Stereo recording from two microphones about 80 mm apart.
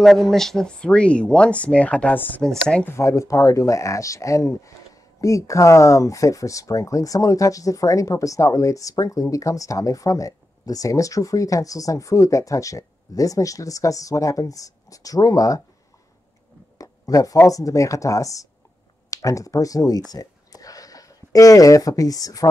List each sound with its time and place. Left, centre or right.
0.0 s speech: centre; by 2.4 s left
2.4 s speech: centre
2.8 s speech: left
16.7 s a sound: left
17.5 s speech: left
20.1 s a sound: left